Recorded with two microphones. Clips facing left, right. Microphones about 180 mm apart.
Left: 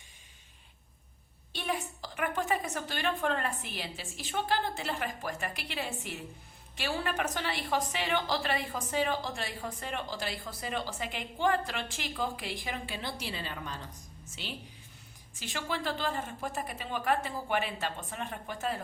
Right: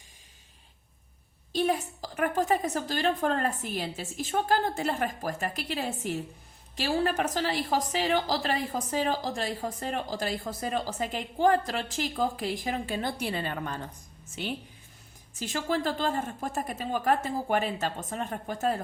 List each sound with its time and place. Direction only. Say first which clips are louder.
1.5 s a woman's voice: right 8 dB; 40° right (ahead or behind)
15.4 s a woman's voice: right 7 dB; 45° right (ahead or behind)